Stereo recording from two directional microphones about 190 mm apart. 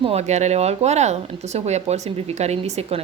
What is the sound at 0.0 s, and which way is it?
Speech, 35° right (ahead or behind).